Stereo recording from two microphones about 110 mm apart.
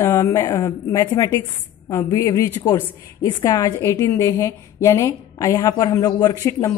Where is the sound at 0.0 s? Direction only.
30° left (ahead or behind).